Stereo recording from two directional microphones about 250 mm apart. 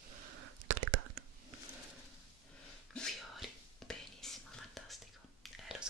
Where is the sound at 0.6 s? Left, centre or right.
Right.